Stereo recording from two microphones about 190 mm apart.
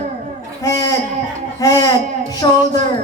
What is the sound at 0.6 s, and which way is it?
A woman's voice, 15° left (ahead or behind).